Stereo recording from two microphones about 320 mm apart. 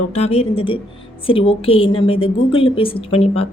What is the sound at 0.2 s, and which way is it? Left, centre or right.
A woman's voice, centre.